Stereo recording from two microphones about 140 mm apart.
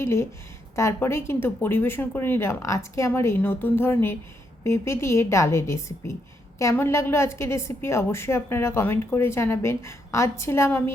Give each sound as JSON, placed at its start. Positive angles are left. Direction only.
{"t": 0.0, "sound": "a woman's voice", "side_deg": 20}